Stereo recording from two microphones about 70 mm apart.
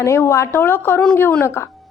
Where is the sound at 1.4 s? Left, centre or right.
Left.